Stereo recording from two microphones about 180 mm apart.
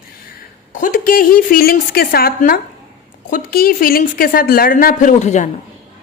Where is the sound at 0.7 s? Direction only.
45° left (ahead or behind).